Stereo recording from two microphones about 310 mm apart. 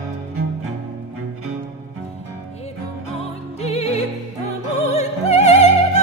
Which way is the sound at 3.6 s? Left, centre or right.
Centre.